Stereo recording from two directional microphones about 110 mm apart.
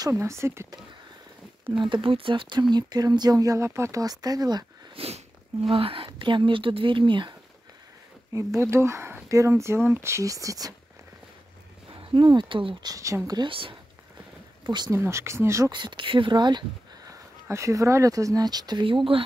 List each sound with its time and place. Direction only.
0.1 s speech: 25° right (ahead or behind)
1.7 s speech: 45° right (ahead or behind)
2.7 s speech: 40° right (ahead or behind)
4.9 s speech: 65° right (ahead or behind); by 7.3 s 45° right (ahead or behind)
8.3 s speech: 30° right (ahead or behind)
11.9 s speech: 50° right (ahead or behind)
12.9 s speech: 30° right (ahead or behind)
13.4 s speech: 50° right (ahead or behind)
14.9 s speech: 25° right (ahead or behind)
15.7 s speech: 45° right (ahead or behind)